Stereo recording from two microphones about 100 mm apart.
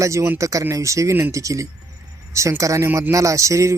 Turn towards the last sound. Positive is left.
turn(degrees=-30)  # may be behind; listen again after turning